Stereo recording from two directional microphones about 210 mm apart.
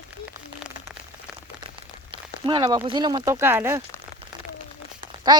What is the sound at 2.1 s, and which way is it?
Speech, 20° right (ahead or behind).